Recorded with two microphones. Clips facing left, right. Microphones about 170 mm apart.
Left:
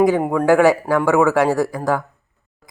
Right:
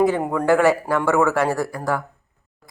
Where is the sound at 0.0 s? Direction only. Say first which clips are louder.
Left 3 dB; 10° left (ahead or behind).